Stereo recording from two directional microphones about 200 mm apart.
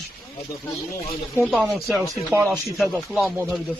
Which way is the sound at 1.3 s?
5° left (ahead or behind).